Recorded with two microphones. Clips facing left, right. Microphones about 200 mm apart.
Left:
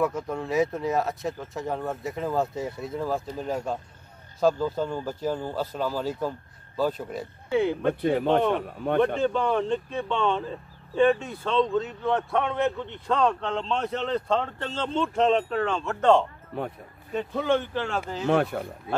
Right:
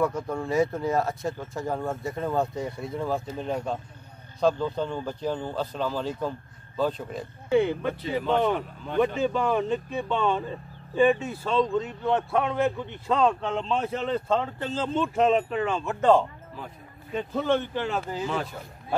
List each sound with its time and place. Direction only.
0.0 s speech: centre (ahead or behind)
8.7 s speech: 60° left (ahead or behind)
9.2 s speech: 5° right (ahead or behind)
17.1 s speech: 5° left (ahead or behind)
17.7 s speech: 10° right (ahead or behind)
18.2 s speech: 60° left (ahead or behind)